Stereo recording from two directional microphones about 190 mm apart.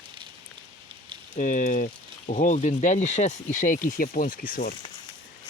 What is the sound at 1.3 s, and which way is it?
Speech, 45° left (ahead or behind).